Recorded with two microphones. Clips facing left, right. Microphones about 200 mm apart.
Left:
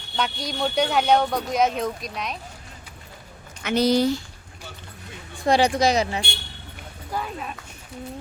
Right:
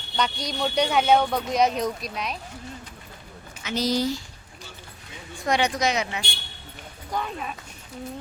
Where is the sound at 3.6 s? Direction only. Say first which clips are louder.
Left 5 dB; 60° left (ahead or behind).